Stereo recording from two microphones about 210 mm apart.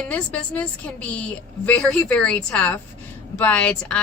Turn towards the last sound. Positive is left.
turn(degrees=5)  # may be behind; listen again after turning